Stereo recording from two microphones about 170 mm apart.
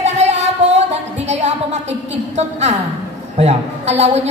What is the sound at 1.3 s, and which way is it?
A woman's voice, 40° right (ahead or behind).